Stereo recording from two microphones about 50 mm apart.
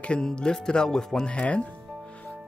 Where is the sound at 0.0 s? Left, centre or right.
Left.